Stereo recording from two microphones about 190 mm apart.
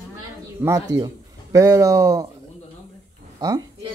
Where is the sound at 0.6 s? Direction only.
15° right (ahead or behind).